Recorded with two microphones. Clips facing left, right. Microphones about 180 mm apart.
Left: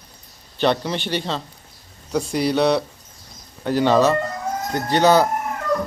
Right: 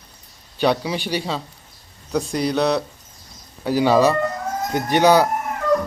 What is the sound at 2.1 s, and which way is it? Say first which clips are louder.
Speech: left 1 dB; centre (ahead or behind).